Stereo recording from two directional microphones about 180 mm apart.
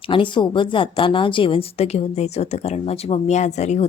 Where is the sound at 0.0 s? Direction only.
30° left (ahead or behind).